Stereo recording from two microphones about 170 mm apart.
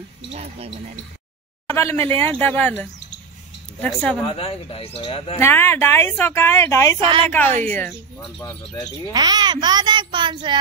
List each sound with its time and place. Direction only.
0.3 s speech: 35° right (ahead or behind)
1.7 s speech: 15° left (ahead or behind)
4.2 s speech: 30° left (ahead or behind)
5.4 s speech: 15° left (ahead or behind)
7.0 s speech: 30° right (ahead or behind)
7.6 s speech: 10° left (ahead or behind)
9.1 s a child's voice: 25° right (ahead or behind)